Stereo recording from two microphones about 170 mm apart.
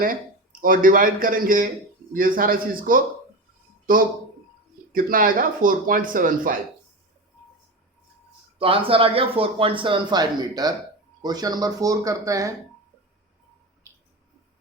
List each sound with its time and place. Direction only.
0.6 s speech: 55° right (ahead or behind)
8.5 s speech: 30° right (ahead or behind)
13.8 s a sound: 20° right (ahead or behind)